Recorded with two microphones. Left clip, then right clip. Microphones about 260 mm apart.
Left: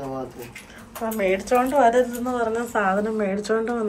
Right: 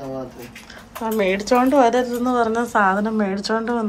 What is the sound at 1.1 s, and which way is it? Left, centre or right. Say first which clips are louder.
A woman's voice: right 3 dB; centre.